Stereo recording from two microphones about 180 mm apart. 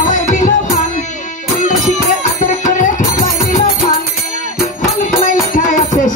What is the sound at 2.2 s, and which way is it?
Music, 45° left (ahead or behind).